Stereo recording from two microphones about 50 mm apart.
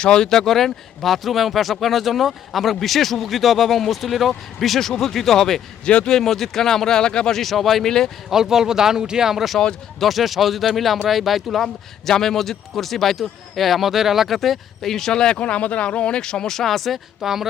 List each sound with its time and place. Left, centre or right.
0.0 s speech: centre
5.8 s speech: left
6.1 s speech: centre
8.3 s speech: centre
15.4 s speech: left; by 17.5 s centre